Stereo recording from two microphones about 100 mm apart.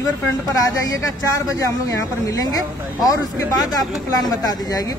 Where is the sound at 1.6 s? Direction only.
35° left (ahead or behind).